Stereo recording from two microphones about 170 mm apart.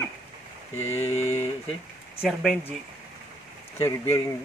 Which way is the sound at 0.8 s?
40° left (ahead or behind).